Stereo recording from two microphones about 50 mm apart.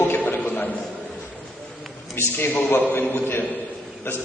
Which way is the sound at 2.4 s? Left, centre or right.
Left.